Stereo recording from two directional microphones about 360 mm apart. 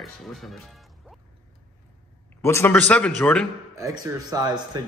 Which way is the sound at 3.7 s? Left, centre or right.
Centre.